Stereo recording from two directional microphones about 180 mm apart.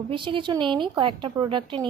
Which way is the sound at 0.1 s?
30° right (ahead or behind).